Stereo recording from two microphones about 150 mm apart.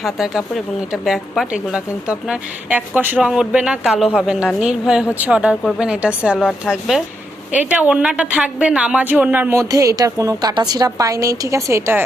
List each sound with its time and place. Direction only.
0.0 s a woman's voice: centre (ahead or behind); by 12.0 s 15° right (ahead or behind)